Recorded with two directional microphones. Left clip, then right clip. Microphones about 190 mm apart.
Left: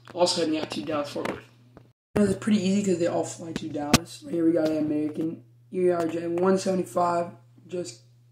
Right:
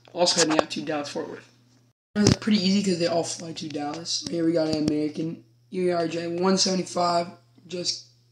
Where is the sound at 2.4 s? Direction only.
20° right (ahead or behind).